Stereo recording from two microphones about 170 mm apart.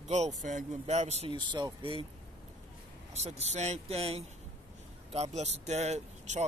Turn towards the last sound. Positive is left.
turn(degrees=-40)  # may be behind; listen again after turning